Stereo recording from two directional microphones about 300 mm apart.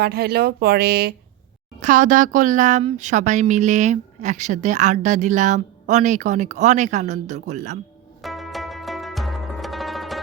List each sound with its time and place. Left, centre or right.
0.0 s speech: right
8.2 s zither: centre